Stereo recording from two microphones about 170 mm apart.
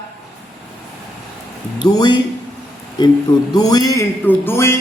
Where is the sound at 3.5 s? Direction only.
20° left (ahead or behind).